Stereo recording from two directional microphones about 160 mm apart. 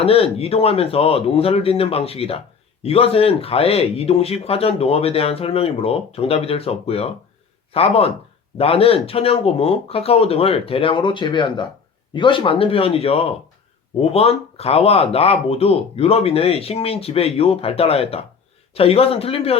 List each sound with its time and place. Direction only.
0.0 s speech: 40° left (ahead or behind)